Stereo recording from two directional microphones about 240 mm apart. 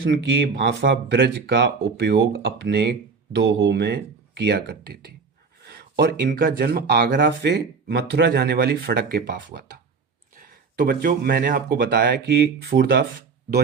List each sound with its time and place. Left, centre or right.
0.1 s speech: right